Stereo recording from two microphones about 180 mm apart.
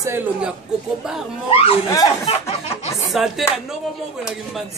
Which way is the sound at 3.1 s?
Centre (ahead or behind).